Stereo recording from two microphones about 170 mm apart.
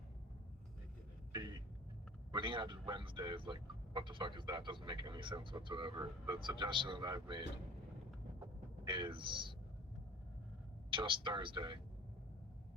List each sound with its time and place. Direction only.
2.3 s speech: 30° right (ahead or behind)
8.8 s speech: 25° right (ahead or behind)
10.9 s speech: 30° right (ahead or behind)